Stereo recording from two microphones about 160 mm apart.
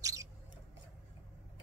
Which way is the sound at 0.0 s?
20° right (ahead or behind).